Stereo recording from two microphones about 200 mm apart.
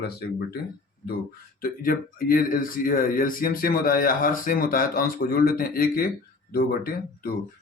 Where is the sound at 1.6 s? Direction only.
45° left (ahead or behind).